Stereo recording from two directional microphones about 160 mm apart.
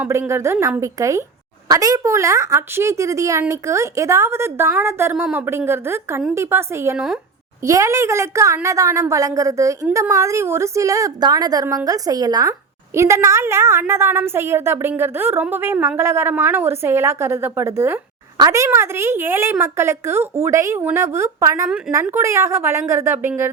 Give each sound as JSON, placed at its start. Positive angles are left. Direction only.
{"t": 0.0, "sound": "a woman's voice", "side_deg": -15}